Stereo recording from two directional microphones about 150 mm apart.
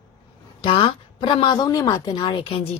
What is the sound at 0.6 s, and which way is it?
A woman's voice, 35° left (ahead or behind).